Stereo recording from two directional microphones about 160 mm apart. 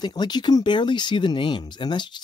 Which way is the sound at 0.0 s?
25° left (ahead or behind).